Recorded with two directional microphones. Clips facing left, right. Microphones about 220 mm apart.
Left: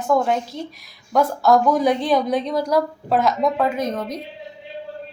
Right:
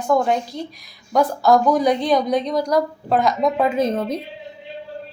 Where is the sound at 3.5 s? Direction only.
20° right (ahead or behind).